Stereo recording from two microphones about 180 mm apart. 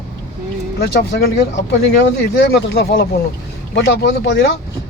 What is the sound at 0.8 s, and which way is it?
Speech, 65° left (ahead or behind).